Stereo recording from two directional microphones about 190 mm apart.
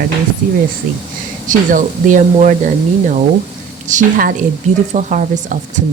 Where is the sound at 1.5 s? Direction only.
45° right (ahead or behind).